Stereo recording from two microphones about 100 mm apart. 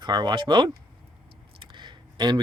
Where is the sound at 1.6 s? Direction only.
50° right (ahead or behind).